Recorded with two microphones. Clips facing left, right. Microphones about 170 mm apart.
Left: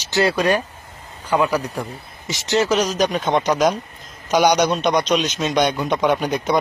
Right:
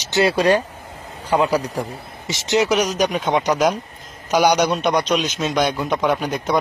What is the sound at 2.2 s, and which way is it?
A man's voice, 20° right (ahead or behind).